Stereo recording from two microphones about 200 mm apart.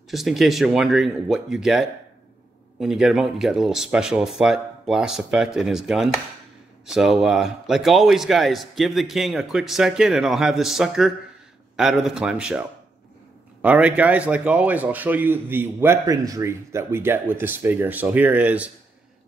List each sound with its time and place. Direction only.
0.1 s a man's voice: centre (ahead or behind)